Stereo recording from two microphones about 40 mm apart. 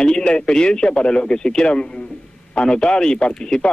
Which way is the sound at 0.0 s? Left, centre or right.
Left.